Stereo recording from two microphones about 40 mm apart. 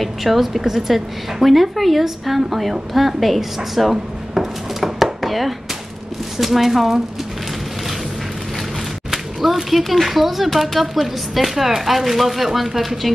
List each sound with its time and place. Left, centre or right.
0.0 s a woman's voice: centre
9.1 s a sound: centre
9.7 s a woman's voice: centre